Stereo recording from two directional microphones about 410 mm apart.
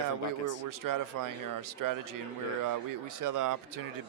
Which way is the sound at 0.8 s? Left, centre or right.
Right.